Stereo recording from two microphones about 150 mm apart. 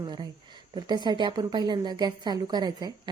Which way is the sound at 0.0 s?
30° right (ahead or behind).